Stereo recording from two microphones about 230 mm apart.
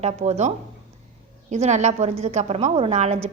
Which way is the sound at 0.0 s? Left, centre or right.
Right.